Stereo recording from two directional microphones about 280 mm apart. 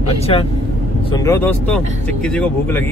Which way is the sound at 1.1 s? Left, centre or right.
Centre.